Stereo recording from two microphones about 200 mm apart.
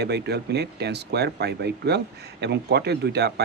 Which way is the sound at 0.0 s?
55° right (ahead or behind).